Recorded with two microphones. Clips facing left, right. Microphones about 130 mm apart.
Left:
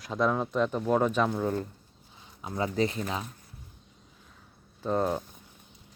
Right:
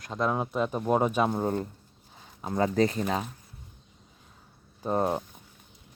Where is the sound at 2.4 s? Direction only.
45° right (ahead or behind).